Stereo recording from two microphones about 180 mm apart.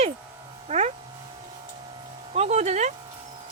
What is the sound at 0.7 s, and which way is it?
Speech, 35° right (ahead or behind).